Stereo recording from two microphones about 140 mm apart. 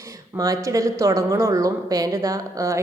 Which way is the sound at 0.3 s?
25° right (ahead or behind).